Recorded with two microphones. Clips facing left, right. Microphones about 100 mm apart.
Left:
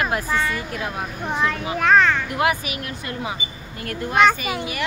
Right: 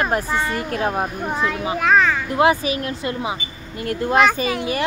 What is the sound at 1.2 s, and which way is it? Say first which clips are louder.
Speech: right 1 dB; 5° right (ahead or behind).